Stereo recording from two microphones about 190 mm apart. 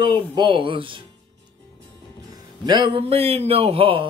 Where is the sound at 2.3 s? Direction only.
20° right (ahead or behind).